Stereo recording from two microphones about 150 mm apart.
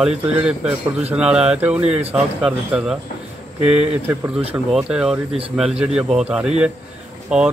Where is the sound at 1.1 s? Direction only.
5° right (ahead or behind).